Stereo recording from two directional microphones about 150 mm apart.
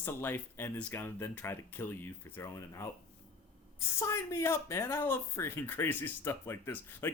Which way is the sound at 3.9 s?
20° left (ahead or behind).